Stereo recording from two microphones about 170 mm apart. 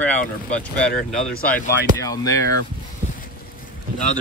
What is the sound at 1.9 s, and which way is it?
Speech, 20° left (ahead or behind).